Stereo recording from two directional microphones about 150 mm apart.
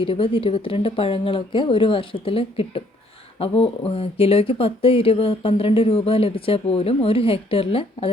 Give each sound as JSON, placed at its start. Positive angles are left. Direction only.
{"t": 0.0, "sound": "speech", "side_deg": 35}